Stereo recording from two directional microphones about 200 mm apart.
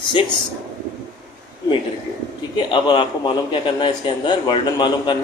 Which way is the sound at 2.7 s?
25° left (ahead or behind).